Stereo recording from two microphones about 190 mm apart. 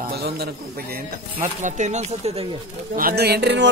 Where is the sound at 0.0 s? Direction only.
55° right (ahead or behind).